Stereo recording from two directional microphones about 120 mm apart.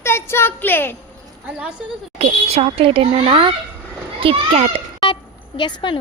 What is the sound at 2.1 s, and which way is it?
A child's voice, 60° right (ahead or behind).